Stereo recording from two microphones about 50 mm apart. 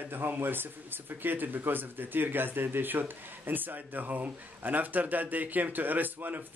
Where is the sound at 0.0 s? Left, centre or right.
Right.